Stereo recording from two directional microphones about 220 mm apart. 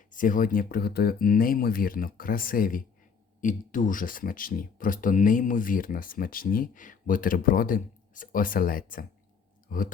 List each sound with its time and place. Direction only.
0.1 s speech: 35° left (ahead or behind)